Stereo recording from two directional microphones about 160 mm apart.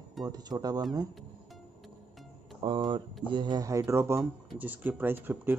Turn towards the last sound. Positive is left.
turn(degrees=-10)  # may be behind; listen again after turning